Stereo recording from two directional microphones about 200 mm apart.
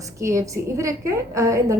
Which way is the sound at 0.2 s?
15° right (ahead or behind).